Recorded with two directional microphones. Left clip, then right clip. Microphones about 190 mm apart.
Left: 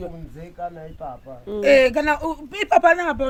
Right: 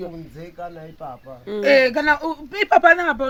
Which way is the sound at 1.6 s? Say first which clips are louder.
Even; 15° left (ahead or behind).